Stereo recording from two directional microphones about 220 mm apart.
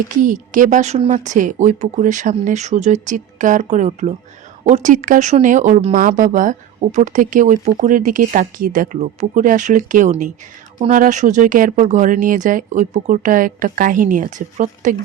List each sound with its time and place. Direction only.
0.2 s speech: 35° right (ahead or behind)